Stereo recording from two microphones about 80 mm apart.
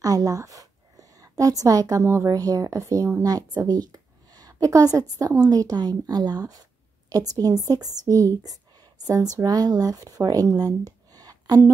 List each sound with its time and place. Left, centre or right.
0.0 s a woman's voice: right